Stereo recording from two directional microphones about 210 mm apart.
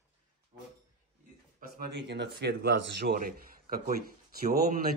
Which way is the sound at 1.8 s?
50° right (ahead or behind).